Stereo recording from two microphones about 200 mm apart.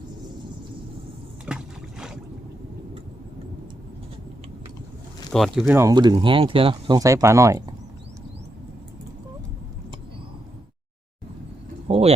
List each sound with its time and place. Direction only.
1.5 s boat: 5° right (ahead or behind)
5.3 s speech: centre (ahead or behind)
5.6 s speech: 15° right (ahead or behind)
11.9 s a sound: 30° right (ahead or behind)